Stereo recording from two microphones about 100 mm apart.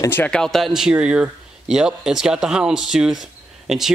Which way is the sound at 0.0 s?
25° left (ahead or behind).